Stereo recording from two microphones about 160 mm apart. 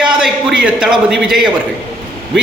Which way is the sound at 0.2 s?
5° right (ahead or behind).